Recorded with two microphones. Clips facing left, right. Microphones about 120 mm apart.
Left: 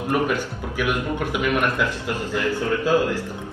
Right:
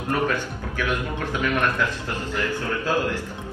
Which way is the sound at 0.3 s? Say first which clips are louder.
Left 2 dB; 15° left (ahead or behind).